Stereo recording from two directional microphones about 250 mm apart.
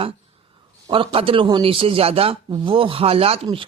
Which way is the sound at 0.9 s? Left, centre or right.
Right.